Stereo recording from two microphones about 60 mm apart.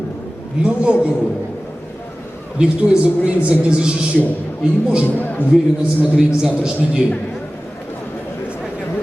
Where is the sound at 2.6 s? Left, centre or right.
Right.